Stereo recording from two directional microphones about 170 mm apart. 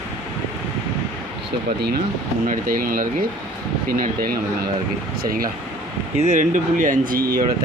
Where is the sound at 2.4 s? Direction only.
55° right (ahead or behind).